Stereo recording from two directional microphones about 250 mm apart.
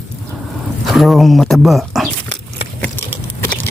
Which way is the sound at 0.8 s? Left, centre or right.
Centre.